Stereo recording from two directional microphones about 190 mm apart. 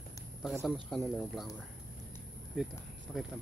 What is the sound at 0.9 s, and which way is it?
Speech, centre (ahead or behind).